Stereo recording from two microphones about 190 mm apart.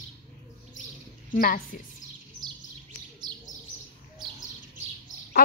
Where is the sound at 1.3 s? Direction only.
45° left (ahead or behind).